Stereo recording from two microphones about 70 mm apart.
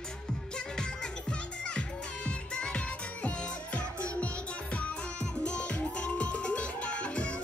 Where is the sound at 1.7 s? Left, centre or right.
Centre.